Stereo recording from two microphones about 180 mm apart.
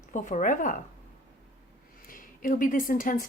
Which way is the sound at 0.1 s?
45° left (ahead or behind).